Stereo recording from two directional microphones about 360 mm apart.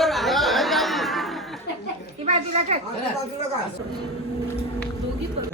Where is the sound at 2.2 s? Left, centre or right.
Centre.